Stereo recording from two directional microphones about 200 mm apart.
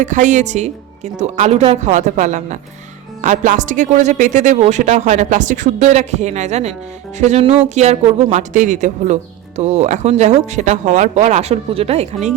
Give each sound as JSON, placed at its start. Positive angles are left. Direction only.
{"t": 0.0, "sound": "speech", "side_deg": -40}